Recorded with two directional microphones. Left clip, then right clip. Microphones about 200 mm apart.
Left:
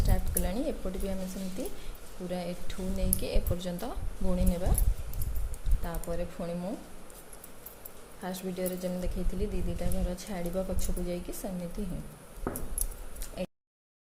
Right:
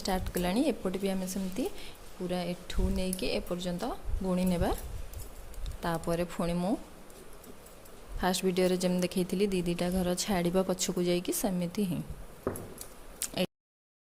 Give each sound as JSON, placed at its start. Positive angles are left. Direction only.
{"t": 0.0, "sound": "speech", "side_deg": -30}
{"t": 5.8, "sound": "speech", "side_deg": -35}
{"t": 8.2, "sound": "speech", "side_deg": -40}
{"t": 13.1, "sound": "a sound", "side_deg": -40}